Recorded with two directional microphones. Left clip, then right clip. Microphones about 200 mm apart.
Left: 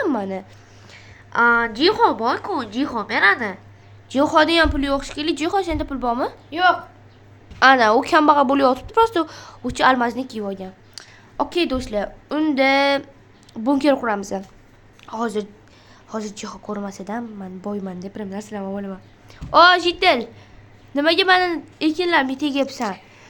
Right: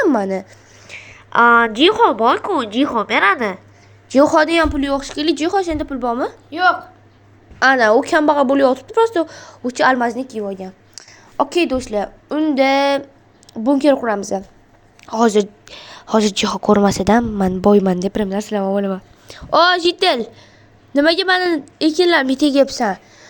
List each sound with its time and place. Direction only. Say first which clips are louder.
0.0 s speech: right 7 dB; 25° right (ahead or behind)
1.5 s a woman's voice: right 5 dB; 10° right (ahead or behind); by 4.4 s 25° right (ahead or behind)
4.4 s a woman's voice: right 1 dB; 10° right (ahead or behind)
6.5 s a woman's voice: right 2 dB; 20° right (ahead or behind)
7.6 s a woman's voice: right 1 dB; 10° right (ahead or behind)
10.6 s a sound: right 3 dB; 15° right (ahead or behind)
11.7 s a woman's voice: right 4 dB; 15° right (ahead or behind)
15.2 s a woman's voice: right 11 dB; 35° right (ahead or behind); by 23.3 s 15° right (ahead or behind)